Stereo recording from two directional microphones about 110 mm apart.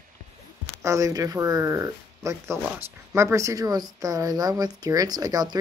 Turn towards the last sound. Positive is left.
turn(degrees=-35)  # may be behind; listen again after turning